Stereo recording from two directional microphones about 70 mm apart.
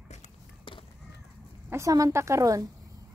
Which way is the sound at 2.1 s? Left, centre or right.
Right.